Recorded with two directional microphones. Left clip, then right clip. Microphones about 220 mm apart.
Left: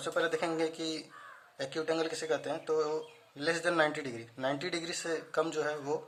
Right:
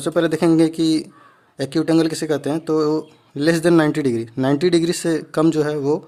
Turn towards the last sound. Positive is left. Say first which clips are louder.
# right 14 dB
turn(degrees=-45)  # may be behind; listen again after turning